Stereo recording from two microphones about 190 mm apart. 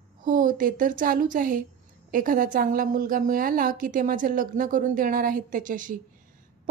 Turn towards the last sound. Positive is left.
turn(degrees=-45)  # may be behind; listen again after turning